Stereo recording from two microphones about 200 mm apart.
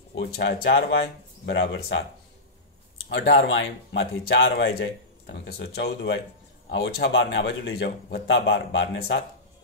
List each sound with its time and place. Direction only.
0.2 s speech: 55° left (ahead or behind)
3.1 s speech: 65° left (ahead or behind)